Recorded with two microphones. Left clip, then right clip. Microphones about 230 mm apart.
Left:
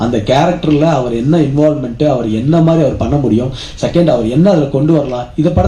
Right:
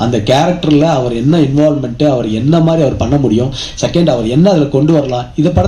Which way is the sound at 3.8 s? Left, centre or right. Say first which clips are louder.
Left 1 dB; right.